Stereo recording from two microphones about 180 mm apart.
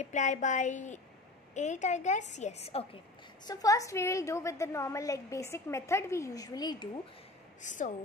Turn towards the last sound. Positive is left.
turn(degrees=45)  # may be behind; listen again after turning